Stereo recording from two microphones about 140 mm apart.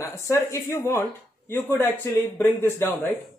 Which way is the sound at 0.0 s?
20° left (ahead or behind).